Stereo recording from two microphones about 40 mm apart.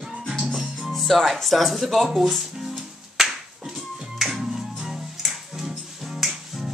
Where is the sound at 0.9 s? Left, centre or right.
Centre.